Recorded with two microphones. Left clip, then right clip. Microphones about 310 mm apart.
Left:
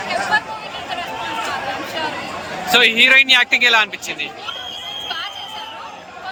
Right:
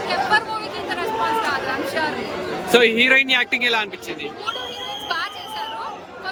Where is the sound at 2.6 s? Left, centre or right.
Centre.